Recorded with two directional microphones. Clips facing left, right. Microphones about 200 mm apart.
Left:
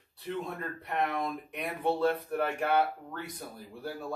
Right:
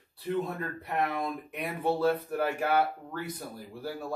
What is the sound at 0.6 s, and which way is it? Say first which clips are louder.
Speech: right 1 dB; 5° right (ahead or behind).